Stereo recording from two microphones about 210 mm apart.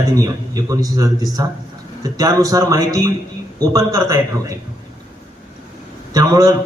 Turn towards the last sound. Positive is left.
turn(degrees=-15)  # may be behind; listen again after turning